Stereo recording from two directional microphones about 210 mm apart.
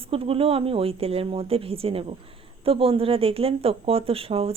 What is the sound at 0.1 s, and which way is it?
Speech, 25° right (ahead or behind).